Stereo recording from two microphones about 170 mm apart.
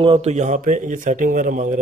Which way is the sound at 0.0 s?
35° right (ahead or behind).